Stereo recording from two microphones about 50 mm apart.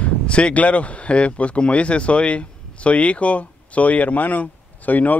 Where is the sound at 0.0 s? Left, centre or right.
Left.